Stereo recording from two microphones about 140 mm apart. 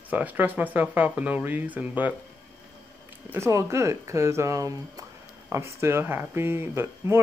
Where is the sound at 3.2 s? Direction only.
20° right (ahead or behind).